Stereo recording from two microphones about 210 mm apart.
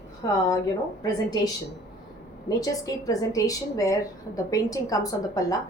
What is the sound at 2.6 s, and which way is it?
A woman's voice, 15° left (ahead or behind).